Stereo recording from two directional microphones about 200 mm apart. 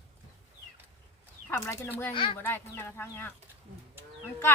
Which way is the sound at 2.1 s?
25° left (ahead or behind).